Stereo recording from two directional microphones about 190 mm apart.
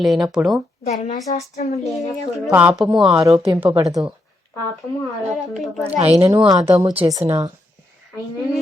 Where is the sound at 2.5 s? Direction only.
10° right (ahead or behind).